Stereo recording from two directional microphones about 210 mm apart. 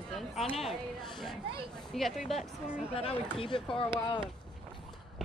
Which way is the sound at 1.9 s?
Centre (ahead or behind).